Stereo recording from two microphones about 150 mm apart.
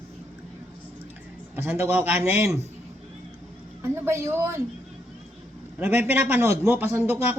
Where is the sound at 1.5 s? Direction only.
15° right (ahead or behind).